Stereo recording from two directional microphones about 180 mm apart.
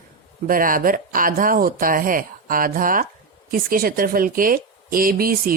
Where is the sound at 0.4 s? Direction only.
50° right (ahead or behind).